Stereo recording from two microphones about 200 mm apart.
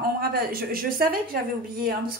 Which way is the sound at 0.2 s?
50° right (ahead or behind).